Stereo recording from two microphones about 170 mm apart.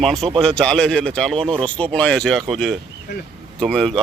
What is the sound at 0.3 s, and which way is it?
Speech, 5° left (ahead or behind).